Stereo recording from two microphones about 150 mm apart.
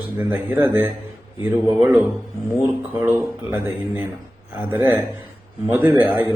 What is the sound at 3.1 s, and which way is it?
Speech, 15° right (ahead or behind).